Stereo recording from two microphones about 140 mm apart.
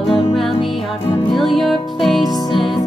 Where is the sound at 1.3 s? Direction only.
Centre (ahead or behind).